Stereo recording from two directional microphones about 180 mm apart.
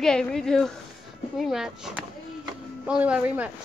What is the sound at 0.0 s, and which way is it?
Speech, 5° left (ahead or behind).